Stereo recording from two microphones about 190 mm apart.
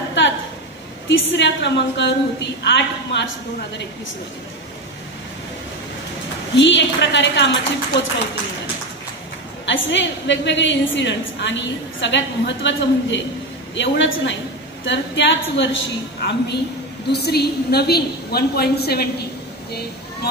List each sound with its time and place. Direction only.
1.0 s a woman's voice: 75° left (ahead or behind)
6.5 s a woman's voice: 70° left (ahead or behind)
9.7 s a woman's voice: 70° left (ahead or behind)
16.2 s a woman's voice: 55° left (ahead or behind)